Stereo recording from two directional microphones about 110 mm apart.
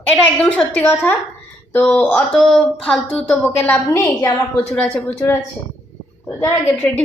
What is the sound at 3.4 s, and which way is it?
A woman's voice, 15° left (ahead or behind).